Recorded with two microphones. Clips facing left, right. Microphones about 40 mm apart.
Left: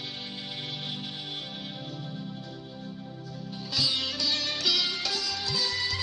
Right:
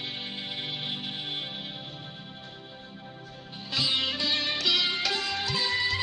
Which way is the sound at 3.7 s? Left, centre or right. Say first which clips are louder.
Right 2 dB; right.